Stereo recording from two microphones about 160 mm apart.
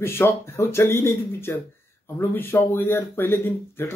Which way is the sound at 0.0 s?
15° left (ahead or behind).